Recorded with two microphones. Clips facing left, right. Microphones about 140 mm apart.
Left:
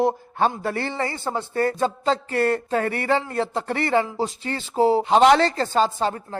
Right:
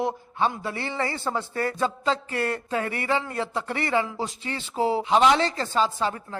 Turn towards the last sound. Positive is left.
turn(degrees=35)  # may be behind; listen again after turning